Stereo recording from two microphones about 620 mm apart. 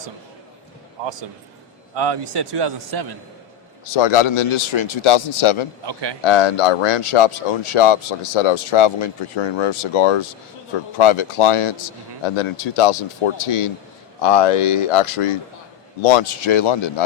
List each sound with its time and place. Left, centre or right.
2.0 s a man's voice: right
3.9 s speech: left
5.8 s a man's voice: right
6.2 s speech: left